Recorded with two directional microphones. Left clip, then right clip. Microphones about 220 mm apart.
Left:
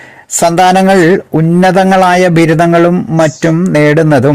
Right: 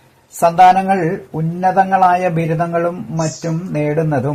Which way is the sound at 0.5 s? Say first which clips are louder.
Left 3 dB; 50° left (ahead or behind).